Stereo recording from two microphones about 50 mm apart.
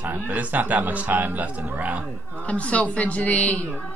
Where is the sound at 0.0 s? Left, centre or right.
Right.